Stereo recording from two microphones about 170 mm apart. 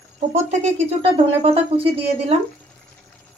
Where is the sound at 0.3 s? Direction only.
40° right (ahead or behind).